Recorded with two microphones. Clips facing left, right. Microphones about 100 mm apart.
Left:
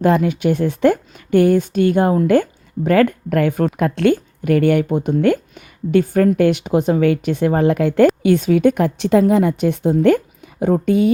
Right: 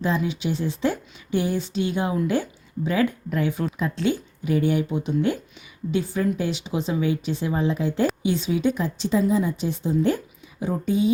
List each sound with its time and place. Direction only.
0.0 s speech: 60° left (ahead or behind)